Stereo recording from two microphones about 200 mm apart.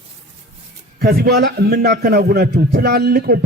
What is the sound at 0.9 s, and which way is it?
A man's voice, 50° right (ahead or behind).